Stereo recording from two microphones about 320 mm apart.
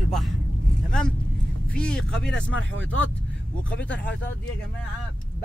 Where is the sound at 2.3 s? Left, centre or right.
Left.